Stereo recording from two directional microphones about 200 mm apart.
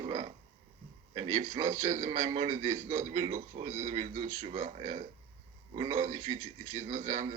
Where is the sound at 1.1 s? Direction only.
30° right (ahead or behind).